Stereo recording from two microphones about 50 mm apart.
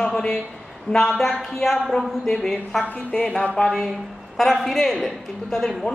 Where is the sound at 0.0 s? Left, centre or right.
Centre.